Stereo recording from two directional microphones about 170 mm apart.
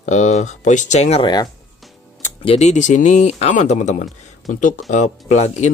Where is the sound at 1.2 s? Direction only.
25° left (ahead or behind).